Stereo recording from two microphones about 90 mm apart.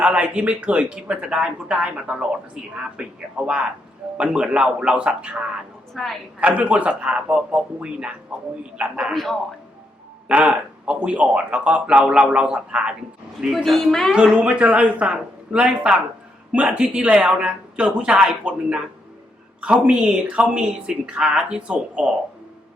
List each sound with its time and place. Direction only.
0.0 s speech: 15° right (ahead or behind)
5.9 s a woman's voice: centre (ahead or behind)
6.4 s a man's voice: 15° right (ahead or behind); by 9.4 s centre (ahead or behind)
10.2 s a man's voice: 15° right (ahead or behind)